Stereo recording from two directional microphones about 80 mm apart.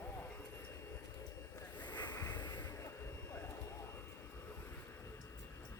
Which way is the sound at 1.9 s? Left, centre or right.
Left.